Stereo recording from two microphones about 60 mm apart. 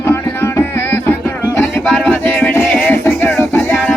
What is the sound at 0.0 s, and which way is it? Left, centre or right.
Music, left.